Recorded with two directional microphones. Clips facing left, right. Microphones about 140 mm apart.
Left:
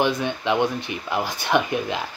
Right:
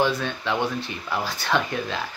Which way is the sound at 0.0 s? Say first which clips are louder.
Left 2 dB; 15° left (ahead or behind).